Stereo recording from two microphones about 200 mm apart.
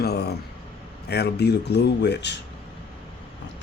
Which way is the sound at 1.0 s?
55° left (ahead or behind).